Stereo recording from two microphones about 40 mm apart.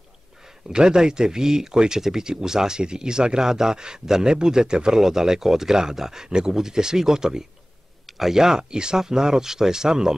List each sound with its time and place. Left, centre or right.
0.4 s speech: centre